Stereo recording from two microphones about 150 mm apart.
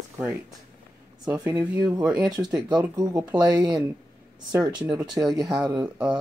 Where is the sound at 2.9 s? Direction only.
25° right (ahead or behind).